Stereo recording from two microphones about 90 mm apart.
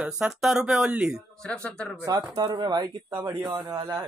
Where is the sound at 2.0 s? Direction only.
45° right (ahead or behind).